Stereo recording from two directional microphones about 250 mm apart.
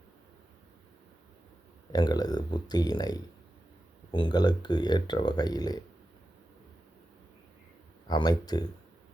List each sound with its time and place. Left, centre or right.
1.9 s speech: centre
8.0 s speech: centre